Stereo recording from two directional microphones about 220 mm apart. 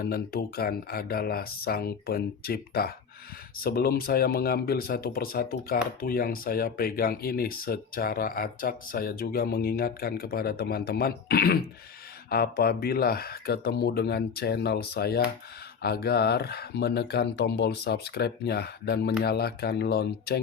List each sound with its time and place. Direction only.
0.0 s speech: 45° left (ahead or behind)